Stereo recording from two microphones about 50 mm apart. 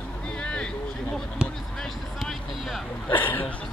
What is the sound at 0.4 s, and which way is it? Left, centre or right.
Vehicle, centre.